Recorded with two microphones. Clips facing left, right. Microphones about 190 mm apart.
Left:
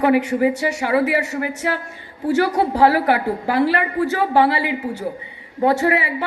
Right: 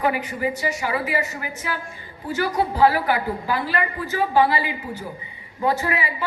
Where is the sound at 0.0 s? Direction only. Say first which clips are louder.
Left 7 dB; 70° left (ahead or behind).